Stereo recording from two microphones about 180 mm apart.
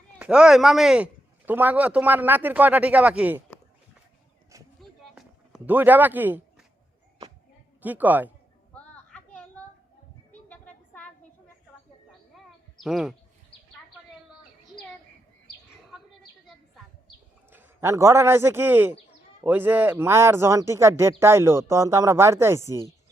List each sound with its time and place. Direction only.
0.2 s speech: 5° right (ahead or behind)
4.8 s a sound: centre (ahead or behind)
7.8 s speech: 10° right (ahead or behind)
9.0 s a sound: 5° left (ahead or behind)
12.8 s speech: centre (ahead or behind)
17.5 s a man's voice: 15° right (ahead or behind)